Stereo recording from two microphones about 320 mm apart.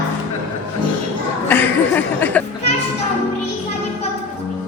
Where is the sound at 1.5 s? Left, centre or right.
Centre.